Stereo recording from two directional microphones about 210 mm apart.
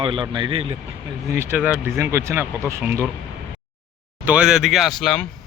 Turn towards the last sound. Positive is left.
turn(degrees=0)  # may be behind; listen again after turning